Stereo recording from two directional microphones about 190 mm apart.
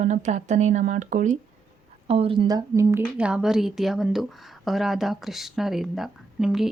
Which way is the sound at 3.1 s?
5° right (ahead or behind).